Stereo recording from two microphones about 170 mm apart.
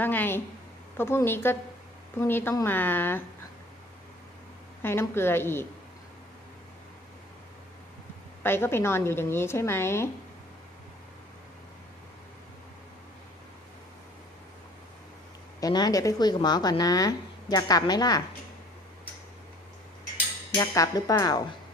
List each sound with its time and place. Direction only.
0.0 s a woman's voice: 10° left (ahead or behind)
4.8 s a woman's voice: 15° left (ahead or behind)
8.4 s a woman's voice: 15° left (ahead or behind)
15.6 s speech: 20° left (ahead or behind)
20.5 s speech: 20° left (ahead or behind)